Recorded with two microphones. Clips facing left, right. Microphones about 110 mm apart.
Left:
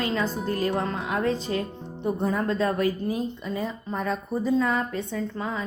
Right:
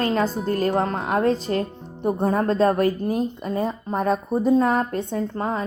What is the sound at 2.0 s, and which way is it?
A woman's voice, 50° right (ahead or behind).